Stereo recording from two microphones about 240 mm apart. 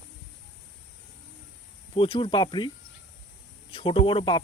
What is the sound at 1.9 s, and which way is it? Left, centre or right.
Speech, left.